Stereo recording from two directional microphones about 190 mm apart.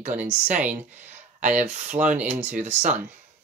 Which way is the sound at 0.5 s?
10° right (ahead or behind).